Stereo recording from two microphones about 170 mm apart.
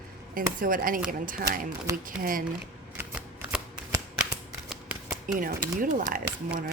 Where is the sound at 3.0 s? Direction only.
10° right (ahead or behind).